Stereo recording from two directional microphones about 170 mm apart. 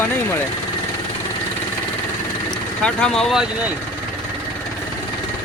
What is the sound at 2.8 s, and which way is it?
Speech, 5° left (ahead or behind).